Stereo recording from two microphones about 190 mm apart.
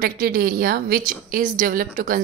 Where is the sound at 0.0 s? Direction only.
50° right (ahead or behind).